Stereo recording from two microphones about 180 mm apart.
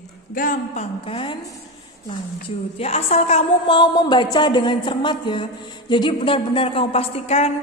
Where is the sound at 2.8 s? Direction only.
35° left (ahead or behind).